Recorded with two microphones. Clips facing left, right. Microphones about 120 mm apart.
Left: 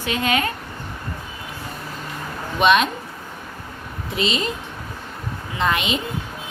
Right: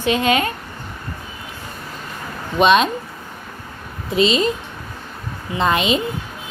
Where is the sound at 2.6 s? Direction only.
25° right (ahead or behind).